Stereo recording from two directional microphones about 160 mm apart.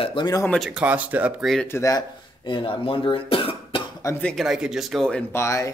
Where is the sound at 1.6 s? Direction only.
15° left (ahead or behind).